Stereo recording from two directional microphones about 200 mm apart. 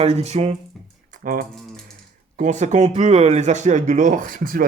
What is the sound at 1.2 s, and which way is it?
Speech, 45° right (ahead or behind).